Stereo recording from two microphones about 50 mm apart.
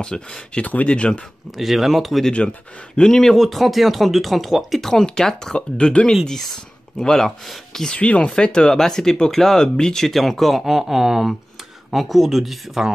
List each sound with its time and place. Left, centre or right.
0.0 s speech: centre
1.6 s speech: centre
3.0 s speech: centre
7.9 s speech: left; by 12.9 s centre